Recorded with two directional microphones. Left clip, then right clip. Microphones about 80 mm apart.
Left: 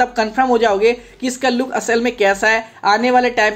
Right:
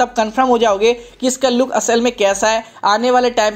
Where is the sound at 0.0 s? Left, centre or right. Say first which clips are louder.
Right 1 dB; right.